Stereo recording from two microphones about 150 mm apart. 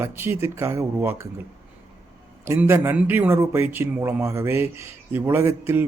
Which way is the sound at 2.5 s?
15° right (ahead or behind).